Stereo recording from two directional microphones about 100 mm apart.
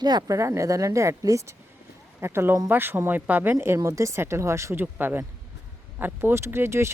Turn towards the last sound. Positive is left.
turn(degrees=-25)  # may be behind; listen again after turning